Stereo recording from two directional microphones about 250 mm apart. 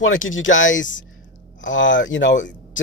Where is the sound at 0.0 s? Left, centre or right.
Left.